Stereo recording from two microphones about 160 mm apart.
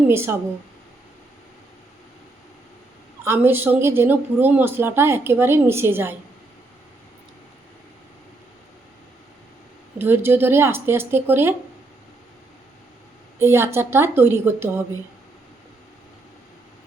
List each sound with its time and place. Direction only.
0.1 s a woman's voice: 15° right (ahead or behind)
3.2 s a woman's voice: 15° right (ahead or behind)
10.0 s a woman's voice: 15° right (ahead or behind)
13.4 s a woman's voice: 15° right (ahead or behind)